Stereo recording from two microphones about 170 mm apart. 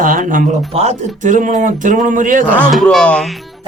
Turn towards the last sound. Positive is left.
turn(degrees=5)  # may be behind; listen again after turning